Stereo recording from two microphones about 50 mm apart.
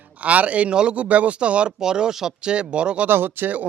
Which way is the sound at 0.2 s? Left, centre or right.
Right.